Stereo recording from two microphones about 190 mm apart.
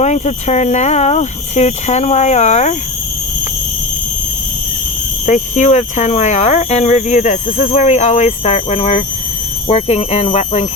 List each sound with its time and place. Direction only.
0.0 s speech: 35° left (ahead or behind)
5.2 s speech: 40° left (ahead or behind)